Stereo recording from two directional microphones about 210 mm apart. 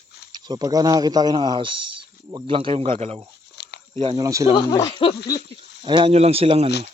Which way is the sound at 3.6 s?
55° left (ahead or behind).